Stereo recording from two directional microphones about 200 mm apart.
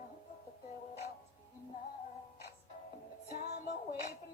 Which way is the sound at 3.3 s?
50° left (ahead or behind).